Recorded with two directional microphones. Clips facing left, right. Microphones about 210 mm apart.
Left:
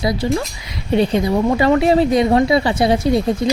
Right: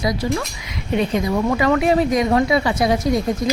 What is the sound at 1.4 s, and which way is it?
Speech, 30° left (ahead or behind).